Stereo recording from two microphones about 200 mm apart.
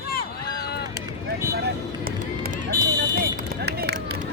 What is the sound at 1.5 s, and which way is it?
Vehicle, 50° right (ahead or behind).